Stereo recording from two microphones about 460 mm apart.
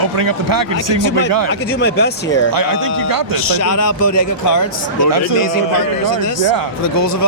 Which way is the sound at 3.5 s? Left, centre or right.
Left.